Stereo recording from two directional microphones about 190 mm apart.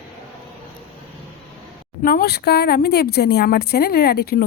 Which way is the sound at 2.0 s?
55° left (ahead or behind).